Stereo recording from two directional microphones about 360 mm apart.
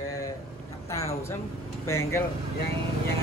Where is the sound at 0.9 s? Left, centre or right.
Centre.